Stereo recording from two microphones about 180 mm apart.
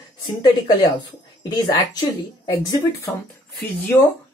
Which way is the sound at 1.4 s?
25° left (ahead or behind).